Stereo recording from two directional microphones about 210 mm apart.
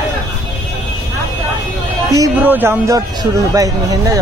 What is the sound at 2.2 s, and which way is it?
Speech, 10° right (ahead or behind).